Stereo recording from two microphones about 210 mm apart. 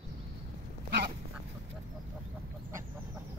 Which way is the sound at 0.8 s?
50° right (ahead or behind).